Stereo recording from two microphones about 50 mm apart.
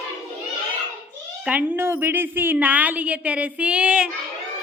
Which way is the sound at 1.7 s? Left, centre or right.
Right.